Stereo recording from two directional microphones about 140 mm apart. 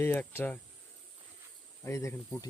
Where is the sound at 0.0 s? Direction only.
15° left (ahead or behind).